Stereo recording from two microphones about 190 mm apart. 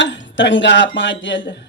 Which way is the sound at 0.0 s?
75° left (ahead or behind).